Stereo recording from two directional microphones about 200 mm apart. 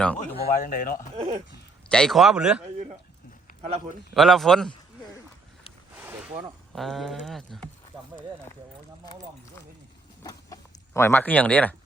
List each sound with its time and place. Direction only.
0.0 s a man's voice: 5° left (ahead or behind)
0.4 s speech: 40° left (ahead or behind)
1.1 s speech: 30° right (ahead or behind)
1.9 s speech: centre (ahead or behind)
4.1 s speech: centre (ahead or behind)
6.0 s speech: 10° right (ahead or behind)
10.2 s speech: 15° left (ahead or behind)